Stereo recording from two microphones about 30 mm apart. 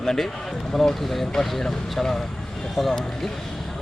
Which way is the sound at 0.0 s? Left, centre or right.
Centre.